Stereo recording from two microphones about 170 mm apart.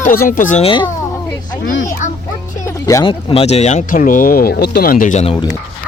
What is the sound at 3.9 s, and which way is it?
Speech, 50° left (ahead or behind).